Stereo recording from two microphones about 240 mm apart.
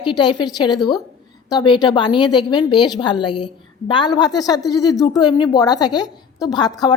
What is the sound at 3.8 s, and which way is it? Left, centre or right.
A woman's voice, centre.